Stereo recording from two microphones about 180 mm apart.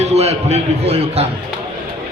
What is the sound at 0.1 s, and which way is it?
A man's voice, 35° right (ahead or behind).